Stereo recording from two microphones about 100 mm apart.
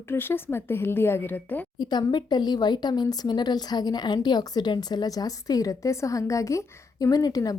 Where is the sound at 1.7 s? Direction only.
45° left (ahead or behind).